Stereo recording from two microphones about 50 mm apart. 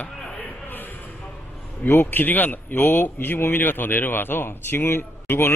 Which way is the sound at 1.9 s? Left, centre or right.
Left.